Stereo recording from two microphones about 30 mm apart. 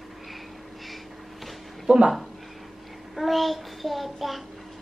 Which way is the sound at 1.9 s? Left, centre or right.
Right.